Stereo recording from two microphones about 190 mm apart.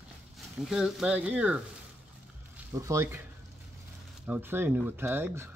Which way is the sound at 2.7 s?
15° right (ahead or behind).